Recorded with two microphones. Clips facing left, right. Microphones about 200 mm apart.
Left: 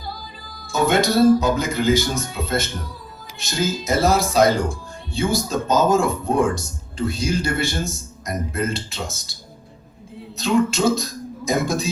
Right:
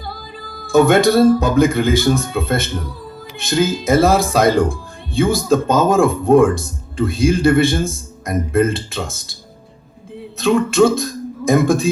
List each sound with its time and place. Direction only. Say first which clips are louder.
0.4 s speech: right 9 dB; 55° right (ahead or behind)
10.3 s speech: right 5 dB; 55° right (ahead or behind)